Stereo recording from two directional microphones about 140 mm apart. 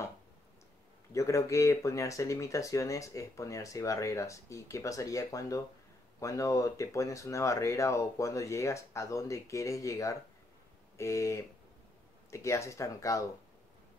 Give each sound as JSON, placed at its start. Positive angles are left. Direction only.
{"t": 1.1, "sound": "speech", "side_deg": 20}